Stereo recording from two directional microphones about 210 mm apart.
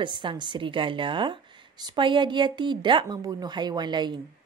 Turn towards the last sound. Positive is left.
turn(degrees=-20)  # may be behind; listen again after turning